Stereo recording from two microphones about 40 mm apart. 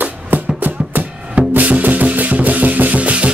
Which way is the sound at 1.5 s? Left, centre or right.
Right.